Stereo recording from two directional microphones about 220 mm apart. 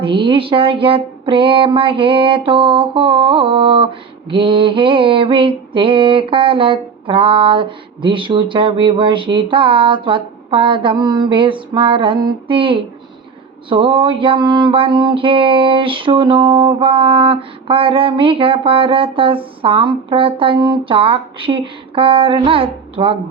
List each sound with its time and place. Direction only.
0.0 s mantra: 25° right (ahead or behind)